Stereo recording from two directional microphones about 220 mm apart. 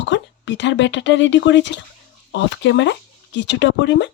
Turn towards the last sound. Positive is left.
turn(degrees=55)  # may be behind; listen again after turning